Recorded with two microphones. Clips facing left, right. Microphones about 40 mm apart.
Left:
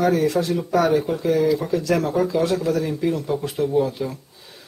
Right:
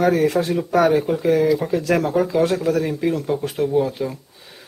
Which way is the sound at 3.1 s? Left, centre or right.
Centre.